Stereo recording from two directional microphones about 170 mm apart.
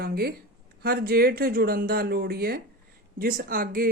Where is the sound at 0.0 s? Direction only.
65° right (ahead or behind).